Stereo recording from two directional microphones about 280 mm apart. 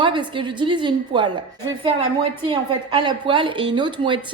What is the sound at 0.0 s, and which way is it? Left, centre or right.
A woman's voice, centre.